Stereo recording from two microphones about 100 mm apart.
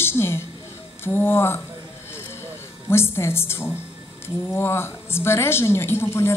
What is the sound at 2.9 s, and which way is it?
A woman's voice, 25° left (ahead or behind).